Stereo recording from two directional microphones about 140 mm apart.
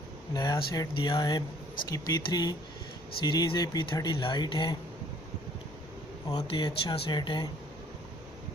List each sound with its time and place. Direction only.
0.3 s speech: 25° left (ahead or behind)
6.5 s speech: 35° left (ahead or behind)